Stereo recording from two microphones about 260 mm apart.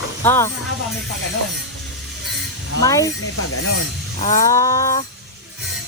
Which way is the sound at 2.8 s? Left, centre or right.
Centre.